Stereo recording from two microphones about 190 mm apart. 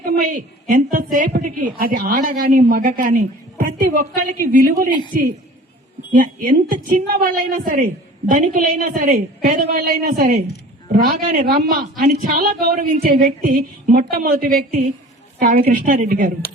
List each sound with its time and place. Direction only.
0.0 s a woman's voice: 45° right (ahead or behind)
6.1 s a woman's voice: 45° right (ahead or behind)